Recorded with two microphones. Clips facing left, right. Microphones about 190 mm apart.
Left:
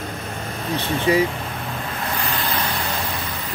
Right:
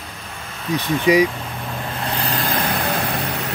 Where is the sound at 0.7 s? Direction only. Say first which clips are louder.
Right 3 dB; 15° right (ahead or behind).